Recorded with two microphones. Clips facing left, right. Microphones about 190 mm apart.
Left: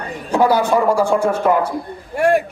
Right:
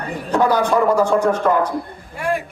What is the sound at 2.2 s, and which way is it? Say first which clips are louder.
Speech: left 7 dB; 70° left (ahead or behind).